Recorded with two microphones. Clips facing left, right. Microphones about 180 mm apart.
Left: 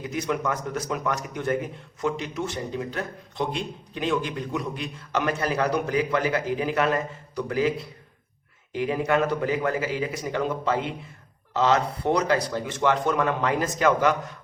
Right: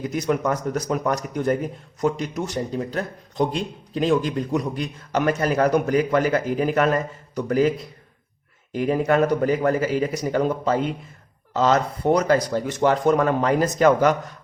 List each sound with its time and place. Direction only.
0.2 s a man's voice: 40° right (ahead or behind)
8.7 s a man's voice: 40° right (ahead or behind)